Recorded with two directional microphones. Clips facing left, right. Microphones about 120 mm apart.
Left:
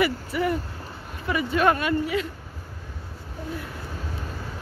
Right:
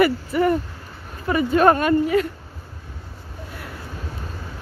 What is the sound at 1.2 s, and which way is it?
Speech, 40° right (ahead or behind).